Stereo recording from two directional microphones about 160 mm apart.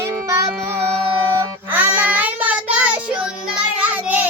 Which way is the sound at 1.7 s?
10° right (ahead or behind).